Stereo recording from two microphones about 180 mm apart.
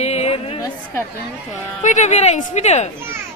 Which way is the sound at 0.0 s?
35° left (ahead or behind).